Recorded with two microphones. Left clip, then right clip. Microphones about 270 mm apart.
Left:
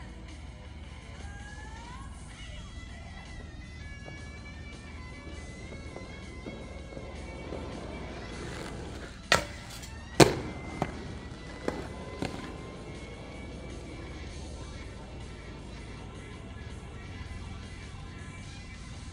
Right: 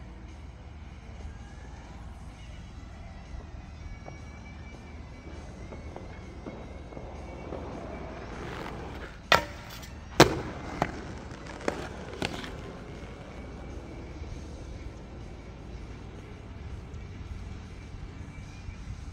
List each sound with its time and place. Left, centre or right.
7.7 s a sound: centre
10.1 s fireworks: centre
11.7 s fireworks: right
12.2 s music: right